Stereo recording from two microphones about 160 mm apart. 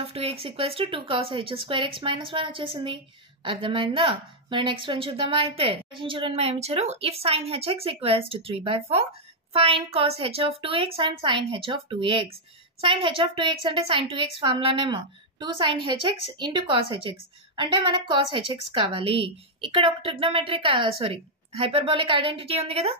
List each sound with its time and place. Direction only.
0.0 s a woman's voice: 35° right (ahead or behind)